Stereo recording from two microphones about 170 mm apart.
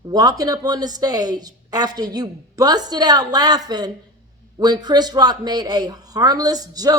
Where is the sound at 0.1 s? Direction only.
25° right (ahead or behind).